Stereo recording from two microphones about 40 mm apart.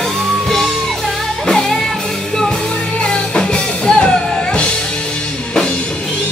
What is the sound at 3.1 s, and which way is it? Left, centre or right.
Music, left.